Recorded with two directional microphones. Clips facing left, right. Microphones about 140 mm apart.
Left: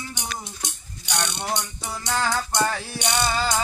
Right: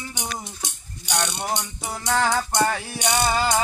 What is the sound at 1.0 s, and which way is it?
Mechanisms, 5° right (ahead or behind).